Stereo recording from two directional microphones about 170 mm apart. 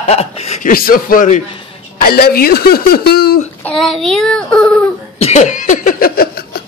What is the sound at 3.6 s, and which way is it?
Child singing, 5° left (ahead or behind).